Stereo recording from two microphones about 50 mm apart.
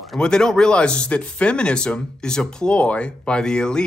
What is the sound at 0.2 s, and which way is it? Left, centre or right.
Speech, centre.